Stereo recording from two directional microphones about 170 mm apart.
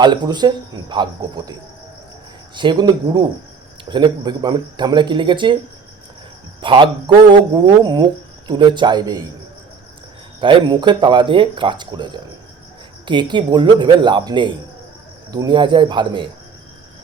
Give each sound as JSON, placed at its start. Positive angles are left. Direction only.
{"t": 0.0, "sound": "speech", "side_deg": -25}
{"t": 2.6, "sound": "speech", "side_deg": -25}
{"t": 6.6, "sound": "speech", "side_deg": -30}
{"t": 10.4, "sound": "speech", "side_deg": -25}